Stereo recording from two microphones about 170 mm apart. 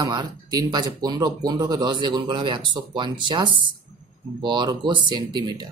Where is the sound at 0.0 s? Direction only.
25° right (ahead or behind).